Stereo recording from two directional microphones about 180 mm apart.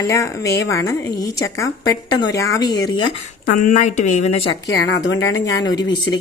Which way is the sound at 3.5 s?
40° left (ahead or behind).